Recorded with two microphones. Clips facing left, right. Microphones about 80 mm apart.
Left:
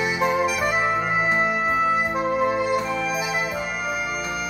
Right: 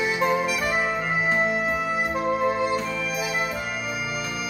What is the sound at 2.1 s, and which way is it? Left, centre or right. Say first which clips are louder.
Music: left 1 dB; centre.